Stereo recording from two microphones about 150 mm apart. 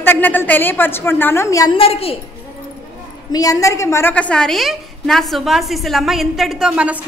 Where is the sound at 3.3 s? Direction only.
25° left (ahead or behind); by 7.0 s 5° right (ahead or behind).